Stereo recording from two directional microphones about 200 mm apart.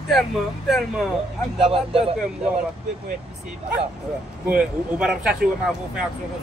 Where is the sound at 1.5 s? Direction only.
25° right (ahead or behind).